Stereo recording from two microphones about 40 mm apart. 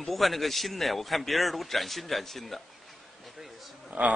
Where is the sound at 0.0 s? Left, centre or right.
Centre.